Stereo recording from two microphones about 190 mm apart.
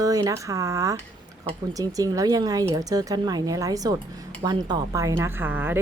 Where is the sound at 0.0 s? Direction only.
20° right (ahead or behind).